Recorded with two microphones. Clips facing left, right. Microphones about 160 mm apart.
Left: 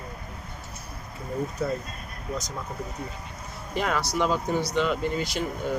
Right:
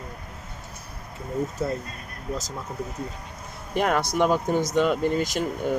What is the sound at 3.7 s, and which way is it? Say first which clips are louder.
Speech: right 4 dB; 55° right (ahead or behind).